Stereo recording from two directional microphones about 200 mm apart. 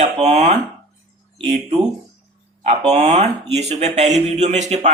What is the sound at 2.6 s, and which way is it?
Speech, 35° right (ahead or behind).